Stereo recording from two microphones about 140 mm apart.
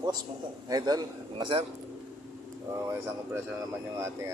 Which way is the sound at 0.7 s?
30° right (ahead or behind).